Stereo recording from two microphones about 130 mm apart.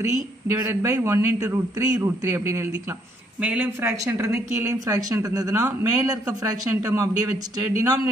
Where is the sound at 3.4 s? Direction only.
10° right (ahead or behind); by 7.5 s 25° right (ahead or behind).